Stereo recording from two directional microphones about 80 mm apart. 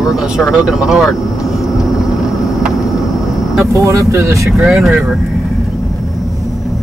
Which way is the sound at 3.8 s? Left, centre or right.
Right.